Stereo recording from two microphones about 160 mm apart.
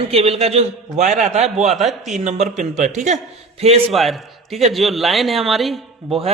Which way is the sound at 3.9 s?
Centre (ahead or behind).